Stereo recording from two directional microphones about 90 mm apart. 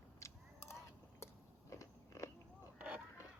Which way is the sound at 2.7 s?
10° right (ahead or behind).